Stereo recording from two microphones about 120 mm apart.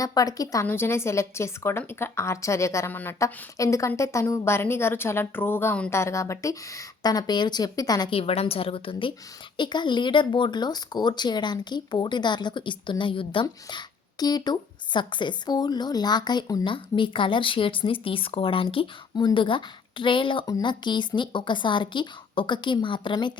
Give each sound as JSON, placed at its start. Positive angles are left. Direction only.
{"t": 0.0, "sound": "speech", "side_deg": 30}
{"t": 0.6, "sound": "a woman's voice", "side_deg": 20}
{"t": 8.1, "sound": "a woman's voice", "side_deg": 55}